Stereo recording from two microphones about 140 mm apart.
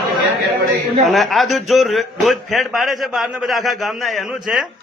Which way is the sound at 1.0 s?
Centre (ahead or behind).